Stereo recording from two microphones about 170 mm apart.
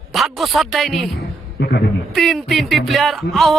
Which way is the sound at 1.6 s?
70° left (ahead or behind).